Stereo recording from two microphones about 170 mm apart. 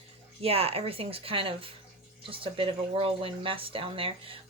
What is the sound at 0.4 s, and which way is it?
Speech, 35° right (ahead or behind).